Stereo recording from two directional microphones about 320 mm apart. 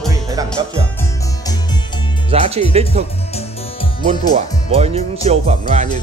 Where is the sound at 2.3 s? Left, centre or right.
Centre.